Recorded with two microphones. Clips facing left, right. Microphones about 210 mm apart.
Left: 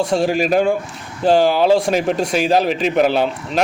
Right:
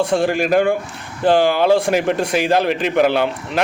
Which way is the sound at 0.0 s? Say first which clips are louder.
Even; 55° right (ahead or behind).